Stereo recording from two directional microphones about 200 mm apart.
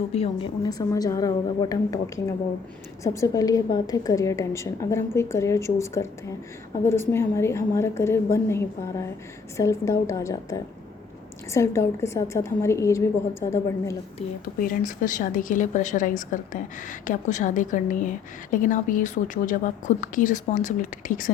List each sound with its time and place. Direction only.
0.1 s a woman's voice: 25° left (ahead or behind)
14.6 s a woman's voice: 40° left (ahead or behind)